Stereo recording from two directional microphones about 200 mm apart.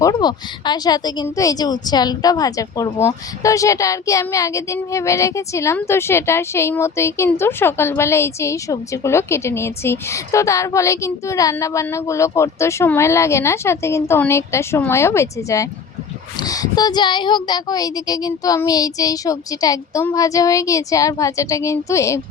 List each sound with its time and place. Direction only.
0.0 s speech: 20° left (ahead or behind)